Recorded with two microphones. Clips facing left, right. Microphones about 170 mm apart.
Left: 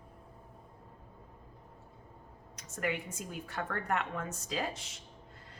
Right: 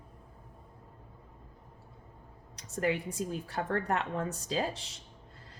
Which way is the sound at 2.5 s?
35° right (ahead or behind).